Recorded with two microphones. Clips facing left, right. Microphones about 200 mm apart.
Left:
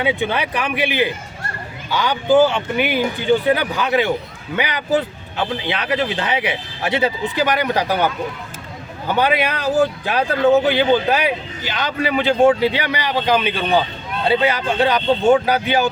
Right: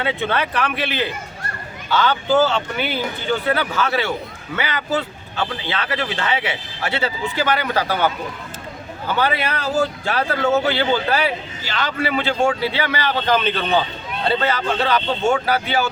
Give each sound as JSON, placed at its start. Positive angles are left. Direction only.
{"t": 0.0, "sound": "speech", "side_deg": 15}